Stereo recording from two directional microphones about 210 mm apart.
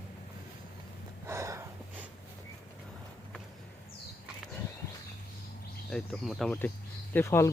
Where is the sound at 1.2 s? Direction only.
15° right (ahead or behind).